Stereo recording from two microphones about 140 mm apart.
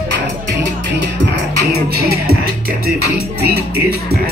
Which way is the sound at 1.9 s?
90° right.